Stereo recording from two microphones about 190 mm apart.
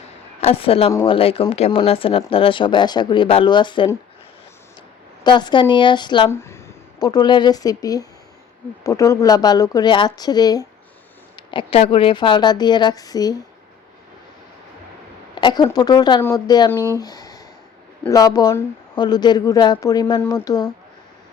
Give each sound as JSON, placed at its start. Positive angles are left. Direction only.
{"t": 0.4, "sound": "speech", "side_deg": 30}
{"t": 5.2, "sound": "speech", "side_deg": 25}
{"t": 15.4, "sound": "speech", "side_deg": 20}